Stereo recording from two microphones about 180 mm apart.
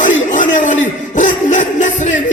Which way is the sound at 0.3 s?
45° left (ahead or behind).